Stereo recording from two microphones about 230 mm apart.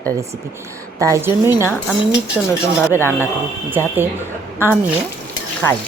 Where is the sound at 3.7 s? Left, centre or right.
Centre.